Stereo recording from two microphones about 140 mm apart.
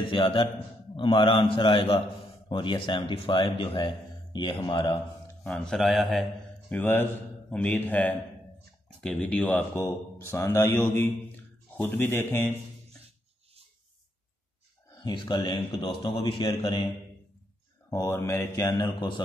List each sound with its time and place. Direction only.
0.1 s speech: 40° left (ahead or behind)
5.4 s speech: 5° left (ahead or behind)
6.7 s speech: 15° left (ahead or behind)
9.0 s speech: 5° left (ahead or behind)
15.0 s speech: 30° left (ahead or behind)
17.8 s speech: 20° left (ahead or behind)